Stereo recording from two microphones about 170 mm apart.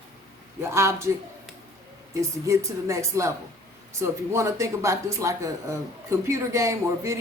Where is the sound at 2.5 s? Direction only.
15° right (ahead or behind).